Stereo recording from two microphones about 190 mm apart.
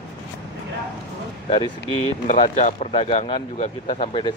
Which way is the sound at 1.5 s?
25° left (ahead or behind).